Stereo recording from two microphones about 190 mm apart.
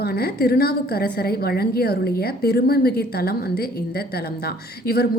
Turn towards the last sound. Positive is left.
turn(degrees=55)  # may be behind; listen again after turning